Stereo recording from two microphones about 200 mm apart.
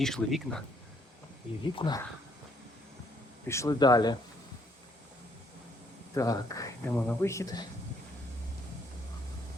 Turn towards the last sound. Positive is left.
turn(degrees=15)  # may be behind; listen again after turning